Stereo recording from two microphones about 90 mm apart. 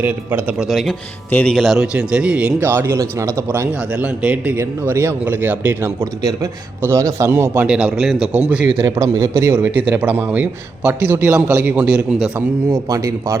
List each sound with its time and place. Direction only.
0.0 s a man's voice: 20° right (ahead or behind)
0.5 s speech: 5° right (ahead or behind)
1.9 s a man's voice: 10° right (ahead or behind)
2.6 s a man's voice: 25° right (ahead or behind)
3.8 s a man's voice: 15° right (ahead or behind)
4.5 s a man's voice: 30° right (ahead or behind)
6.0 s a man's voice: 35° right (ahead or behind)
7.7 s a man's voice: 10° right (ahead or behind)
9.0 s a man's voice: 35° right (ahead or behind); by 12.0 s 15° right (ahead or behind)
12.9 s speech: 35° right (ahead or behind)